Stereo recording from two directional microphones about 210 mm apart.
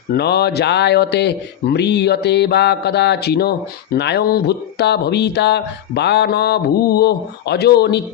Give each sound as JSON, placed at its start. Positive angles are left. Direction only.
{"t": 0.1, "sound": "speech", "side_deg": 50}